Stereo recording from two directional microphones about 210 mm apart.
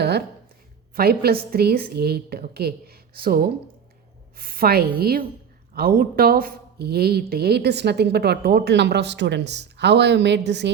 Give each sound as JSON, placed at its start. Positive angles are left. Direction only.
{"t": 0.9, "sound": "speech", "side_deg": -45}